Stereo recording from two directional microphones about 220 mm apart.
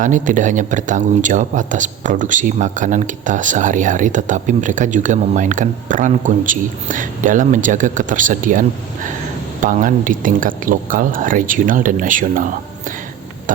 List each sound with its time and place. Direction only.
0.0 s speech: 35° right (ahead or behind)